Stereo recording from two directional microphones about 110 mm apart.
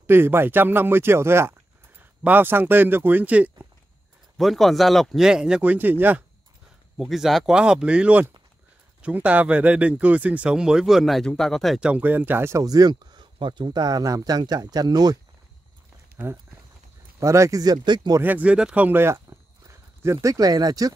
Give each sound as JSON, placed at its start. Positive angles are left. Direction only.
{"t": 0.0, "sound": "speech", "side_deg": -20}
{"t": 4.4, "sound": "speech", "side_deg": 0}
{"t": 7.0, "sound": "speech", "side_deg": -5}
{"t": 11.8, "sound": "speech", "side_deg": -15}
{"t": 16.2, "sound": "speech", "side_deg": -20}
{"t": 18.2, "sound": "speech", "side_deg": -15}